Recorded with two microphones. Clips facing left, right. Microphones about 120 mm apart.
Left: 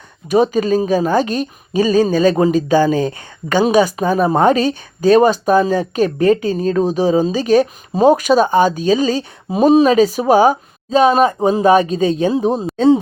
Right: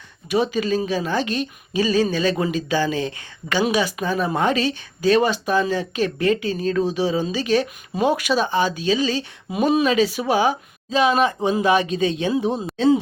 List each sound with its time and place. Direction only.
0.3 s speech: 45° left (ahead or behind)